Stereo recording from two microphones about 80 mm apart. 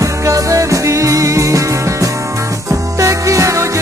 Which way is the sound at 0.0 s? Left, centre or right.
Right.